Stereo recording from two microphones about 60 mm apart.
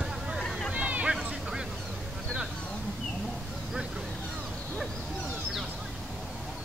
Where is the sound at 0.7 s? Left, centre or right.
Right.